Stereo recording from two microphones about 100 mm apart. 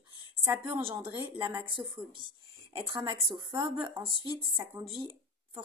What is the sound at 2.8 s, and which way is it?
A woman's voice, 60° right (ahead or behind).